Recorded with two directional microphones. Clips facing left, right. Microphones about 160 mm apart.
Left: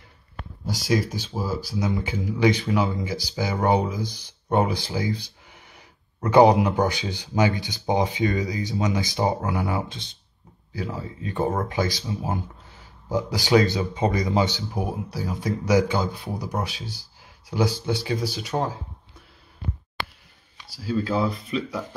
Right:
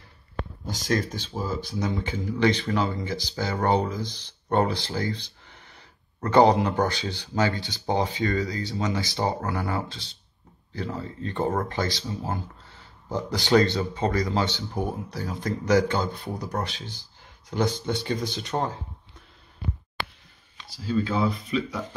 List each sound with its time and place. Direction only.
0.7 s speech: 10° left (ahead or behind)
10.7 s speech: 10° left (ahead or behind)
16.8 s speech: 20° right (ahead or behind)
17.5 s speech: 5° left (ahead or behind)
20.8 s speech: centre (ahead or behind)